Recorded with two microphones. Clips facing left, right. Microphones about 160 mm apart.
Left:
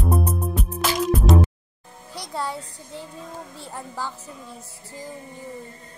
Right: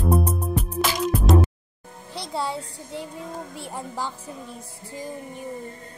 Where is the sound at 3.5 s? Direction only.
15° right (ahead or behind).